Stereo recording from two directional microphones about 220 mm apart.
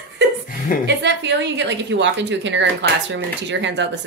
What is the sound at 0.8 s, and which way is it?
A woman's voice, 50° right (ahead or behind).